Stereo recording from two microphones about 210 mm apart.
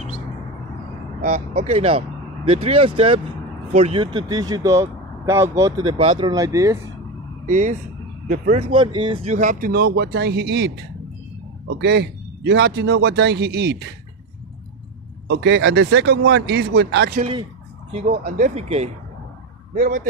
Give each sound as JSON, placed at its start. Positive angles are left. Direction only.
{"t": 1.2, "sound": "speech", "side_deg": -30}
{"t": 7.4, "sound": "a man's voice", "side_deg": -35}
{"t": 15.2, "sound": "a man's voice", "side_deg": -55}
{"t": 17.2, "sound": "speech", "side_deg": -25}
{"t": 18.0, "sound": "speech", "side_deg": -40}